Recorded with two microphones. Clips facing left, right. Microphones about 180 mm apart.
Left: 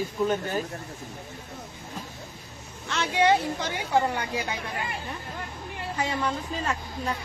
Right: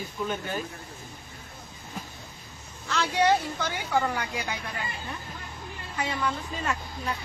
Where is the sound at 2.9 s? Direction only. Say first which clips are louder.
Right 1 dB; 25° left (ahead or behind).